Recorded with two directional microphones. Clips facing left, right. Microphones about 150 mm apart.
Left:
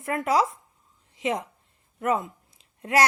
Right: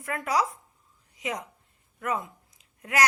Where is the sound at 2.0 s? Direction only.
25° left (ahead or behind).